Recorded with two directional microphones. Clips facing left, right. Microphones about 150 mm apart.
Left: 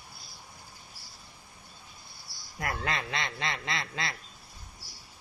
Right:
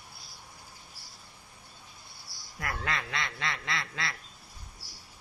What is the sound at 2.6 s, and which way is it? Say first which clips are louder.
A man's voice: left 2 dB; 25° left (ahead or behind).